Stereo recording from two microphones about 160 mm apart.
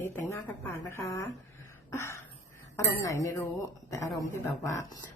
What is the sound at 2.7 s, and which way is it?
Speech, 20° left (ahead or behind).